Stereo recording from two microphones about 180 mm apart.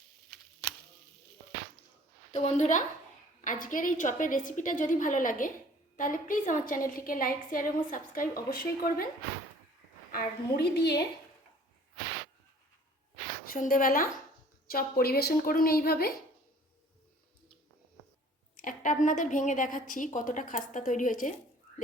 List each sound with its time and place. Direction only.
2.3 s a woman's voice: 40° left (ahead or behind)
10.1 s a woman's voice: 60° left (ahead or behind)
13.4 s a woman's voice: 50° left (ahead or behind)
18.5 s a woman's voice: 50° left (ahead or behind)